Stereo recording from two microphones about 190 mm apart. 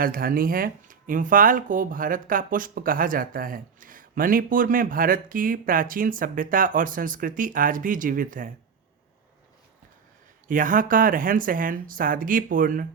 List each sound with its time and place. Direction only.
0.0 s speech: 50° right (ahead or behind)
10.5 s speech: 45° right (ahead or behind)